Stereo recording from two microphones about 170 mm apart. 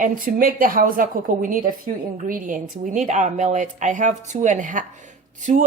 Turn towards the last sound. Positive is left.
turn(degrees=-45)  # may be behind; listen again after turning